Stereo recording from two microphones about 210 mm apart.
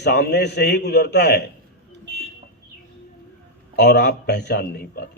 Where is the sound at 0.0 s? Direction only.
50° left (ahead or behind).